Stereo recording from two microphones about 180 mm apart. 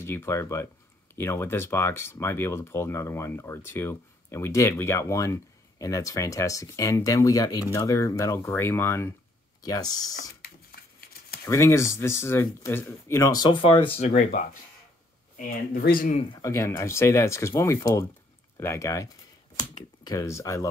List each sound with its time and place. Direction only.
0.0 s speech: 15° left (ahead or behind)
10.4 s a sound: 60° left (ahead or behind)
11.4 s speech: 15° left (ahead or behind)
13.9 s speech: 45° left (ahead or behind)
16.3 s speech: 15° left (ahead or behind)